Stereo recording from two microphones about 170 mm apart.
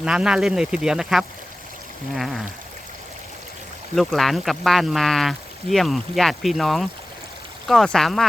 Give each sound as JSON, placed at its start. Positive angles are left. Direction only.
{"t": 0.0, "sound": "speech", "side_deg": -5}
{"t": 3.9, "sound": "speech", "side_deg": 0}